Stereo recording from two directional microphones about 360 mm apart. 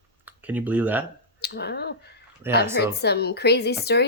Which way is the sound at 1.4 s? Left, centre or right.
Left.